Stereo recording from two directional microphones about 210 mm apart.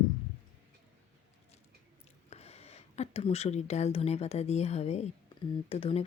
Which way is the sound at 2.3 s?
30° left (ahead or behind).